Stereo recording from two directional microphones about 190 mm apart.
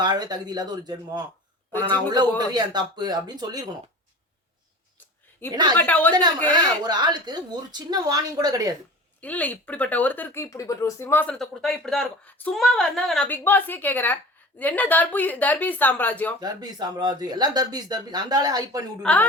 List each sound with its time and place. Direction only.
0.0 s speech: 20° right (ahead or behind)
5.5 s speech: 20° right (ahead or behind)
5.7 s speech: 10° left (ahead or behind)
6.8 s speech: 20° right (ahead or behind)
9.2 s speech: 10° left (ahead or behind)
16.4 s speech: 20° right (ahead or behind)